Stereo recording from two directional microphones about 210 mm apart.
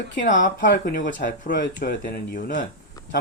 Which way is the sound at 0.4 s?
45° left (ahead or behind).